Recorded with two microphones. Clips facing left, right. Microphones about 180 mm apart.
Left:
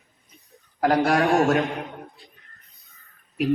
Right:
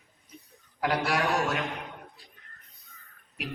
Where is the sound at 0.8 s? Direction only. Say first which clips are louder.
Left 8 dB; 45° left (ahead or behind).